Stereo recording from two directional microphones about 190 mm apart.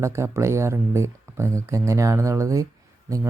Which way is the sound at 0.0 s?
15° right (ahead or behind).